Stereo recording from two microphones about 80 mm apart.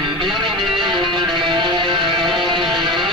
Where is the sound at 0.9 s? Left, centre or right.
Right.